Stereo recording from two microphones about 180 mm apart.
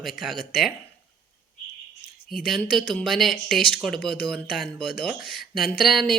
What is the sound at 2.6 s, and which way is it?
Speech, 55° left (ahead or behind).